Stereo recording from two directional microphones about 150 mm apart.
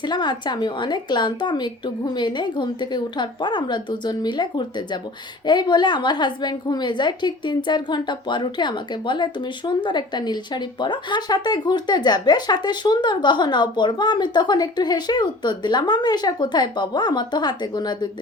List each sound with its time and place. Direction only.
0.0 s a woman's voice: 30° left (ahead or behind)